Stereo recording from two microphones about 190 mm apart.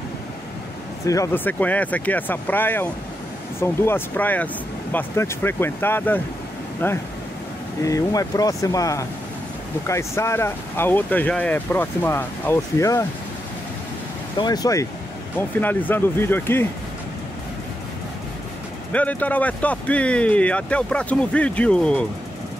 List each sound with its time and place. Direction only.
1.0 s speech: 15° left (ahead or behind)
14.4 s speech: 20° left (ahead or behind)
18.9 s speech: 10° left (ahead or behind)